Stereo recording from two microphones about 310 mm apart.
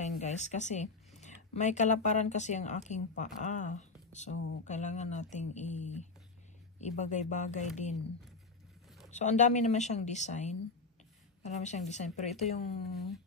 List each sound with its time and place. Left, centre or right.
0.0 s speech: left
9.1 s speech: left